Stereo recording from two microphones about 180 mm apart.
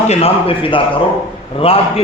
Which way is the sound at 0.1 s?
35° left (ahead or behind).